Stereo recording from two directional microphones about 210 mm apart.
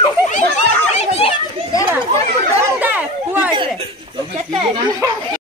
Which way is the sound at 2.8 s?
10° right (ahead or behind).